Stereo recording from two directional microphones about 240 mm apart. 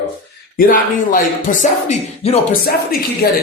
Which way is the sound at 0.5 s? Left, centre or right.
Left.